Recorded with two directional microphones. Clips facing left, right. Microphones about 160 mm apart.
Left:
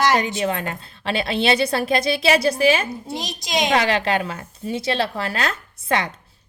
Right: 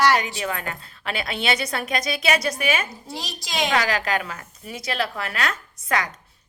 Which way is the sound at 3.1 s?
20° left (ahead or behind).